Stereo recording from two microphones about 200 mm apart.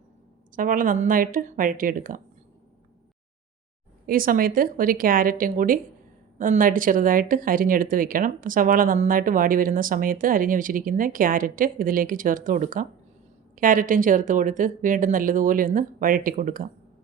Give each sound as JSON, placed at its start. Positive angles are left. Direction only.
{"t": 0.5, "sound": "speech", "side_deg": -45}
{"t": 4.0, "sound": "speech", "side_deg": -45}